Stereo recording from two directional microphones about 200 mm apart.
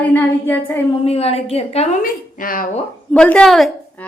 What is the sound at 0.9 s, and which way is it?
Speech, 30° left (ahead or behind).